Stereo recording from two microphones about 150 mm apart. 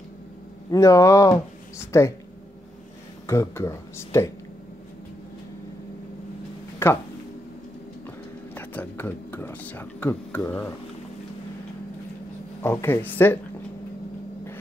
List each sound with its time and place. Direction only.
0.7 s speech: 20° left (ahead or behind)
3.3 s speech: 20° left (ahead or behind)
6.8 s speech: 15° left (ahead or behind)
8.5 s speech: 10° left (ahead or behind)
12.6 s speech: 15° left (ahead or behind)